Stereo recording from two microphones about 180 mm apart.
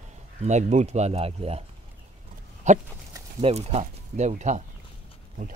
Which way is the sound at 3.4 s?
35° right (ahead or behind).